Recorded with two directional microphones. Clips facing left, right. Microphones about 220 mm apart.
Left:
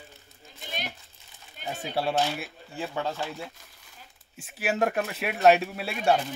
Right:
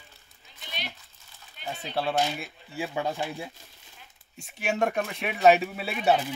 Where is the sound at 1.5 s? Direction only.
45° left (ahead or behind).